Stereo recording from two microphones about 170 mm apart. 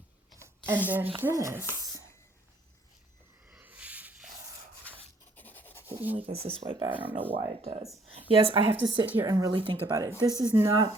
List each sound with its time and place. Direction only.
0.3 s a sound: 15° right (ahead or behind)
1.2 s speech: 15° right (ahead or behind)
3.5 s a sound: 10° right (ahead or behind)
4.9 s rub: 10° left (ahead or behind)
5.4 s a sound: 10° left (ahead or behind)
5.9 s writing: 10° right (ahead or behind)
6.1 s speech: 35° right (ahead or behind)
6.9 s speech: 10° right (ahead or behind)
7.3 s speech: 35° right (ahead or behind)
9.0 s speech: 10° right (ahead or behind)
9.3 s speech: 25° right (ahead or behind)